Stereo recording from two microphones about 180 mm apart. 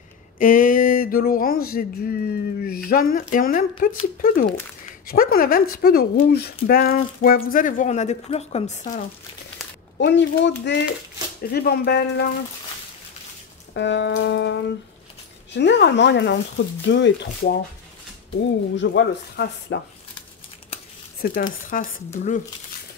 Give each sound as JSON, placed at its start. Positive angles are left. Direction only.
{"t": 0.4, "sound": "a sound", "side_deg": 50}
{"t": 9.9, "sound": "speech", "side_deg": 75}
{"t": 11.5, "sound": "speech", "side_deg": 60}
{"t": 13.7, "sound": "speech", "side_deg": 85}
{"t": 16.8, "sound": "speech", "side_deg": 85}
{"t": 18.8, "sound": "speech", "side_deg": 80}
{"t": 21.2, "sound": "speech", "side_deg": 55}
{"t": 21.6, "sound": "a sound", "side_deg": 45}